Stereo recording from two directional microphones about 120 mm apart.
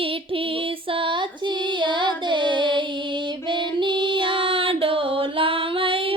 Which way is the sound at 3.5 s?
40° right (ahead or behind).